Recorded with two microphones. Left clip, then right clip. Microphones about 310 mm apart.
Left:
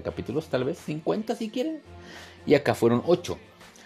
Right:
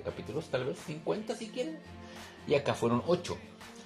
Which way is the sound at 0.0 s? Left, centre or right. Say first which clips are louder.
Left 7 dB; left.